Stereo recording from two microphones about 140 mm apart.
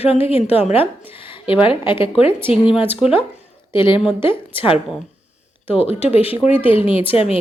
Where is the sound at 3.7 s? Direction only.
35° left (ahead or behind).